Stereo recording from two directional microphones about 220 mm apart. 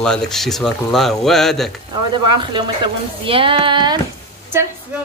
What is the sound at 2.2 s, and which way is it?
A woman's voice, 20° right (ahead or behind).